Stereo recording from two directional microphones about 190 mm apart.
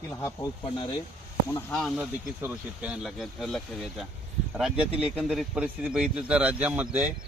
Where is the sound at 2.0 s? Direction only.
10° right (ahead or behind).